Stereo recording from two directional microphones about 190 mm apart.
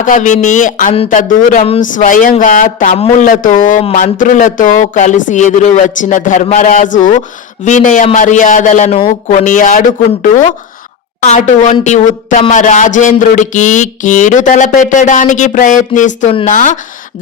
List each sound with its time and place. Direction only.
0.0 s a woman's voice: 40° left (ahead or behind)
11.2 s a woman's voice: 40° left (ahead or behind)